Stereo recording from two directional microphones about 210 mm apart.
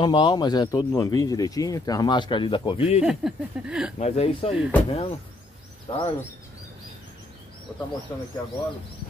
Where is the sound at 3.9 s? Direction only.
30° left (ahead or behind).